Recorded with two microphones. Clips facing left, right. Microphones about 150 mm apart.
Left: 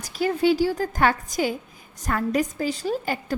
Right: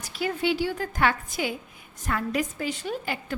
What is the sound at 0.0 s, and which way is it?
A woman's voice, 40° left (ahead or behind).